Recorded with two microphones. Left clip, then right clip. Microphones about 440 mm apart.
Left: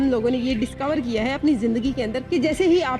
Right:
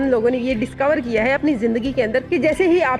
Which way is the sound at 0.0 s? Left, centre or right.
Right.